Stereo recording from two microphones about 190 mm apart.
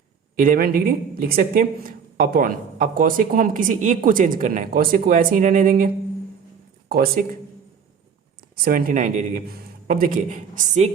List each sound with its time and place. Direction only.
0.3 s speech: 50° right (ahead or behind)
8.6 s speech: 50° right (ahead or behind)